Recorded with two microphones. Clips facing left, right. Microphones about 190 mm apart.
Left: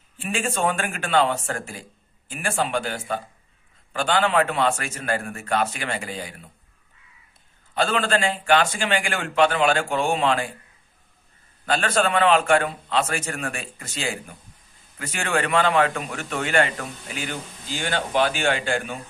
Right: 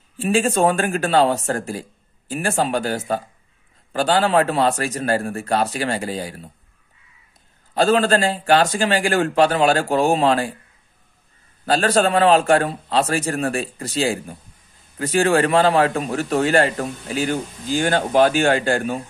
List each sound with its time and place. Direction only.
0.2 s a man's voice: 35° right (ahead or behind)
7.7 s a man's voice: 40° right (ahead or behind)
11.6 s a man's voice: 35° right (ahead or behind)